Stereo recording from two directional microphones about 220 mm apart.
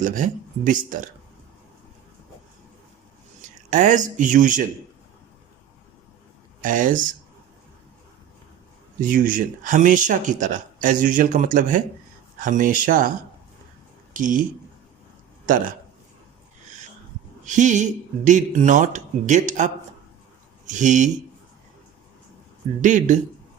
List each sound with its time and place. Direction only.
0.0 s speech: 35° right (ahead or behind)
3.7 s speech: 35° right (ahead or behind)
6.6 s speech: 35° right (ahead or behind)
9.0 s speech: 40° right (ahead or behind)
14.2 s speech: 35° right (ahead or behind)
15.4 s speech: 35° right (ahead or behind)
17.4 s speech: 35° right (ahead or behind)
22.8 s speech: 35° right (ahead or behind)